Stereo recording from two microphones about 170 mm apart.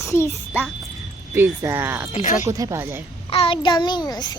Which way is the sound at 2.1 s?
40° left (ahead or behind).